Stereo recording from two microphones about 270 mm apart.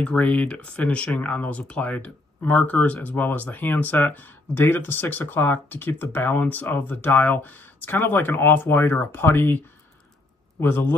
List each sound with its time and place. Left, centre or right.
0.0 s speech: centre
10.6 s speech: centre